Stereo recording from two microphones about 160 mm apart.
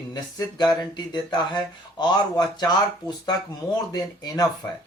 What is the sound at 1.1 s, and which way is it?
Speech, 30° left (ahead or behind).